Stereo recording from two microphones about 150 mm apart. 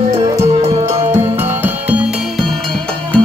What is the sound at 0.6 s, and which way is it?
Music, 45° right (ahead or behind).